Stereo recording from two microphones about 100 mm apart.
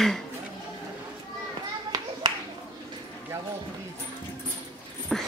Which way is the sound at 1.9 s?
45° right (ahead or behind).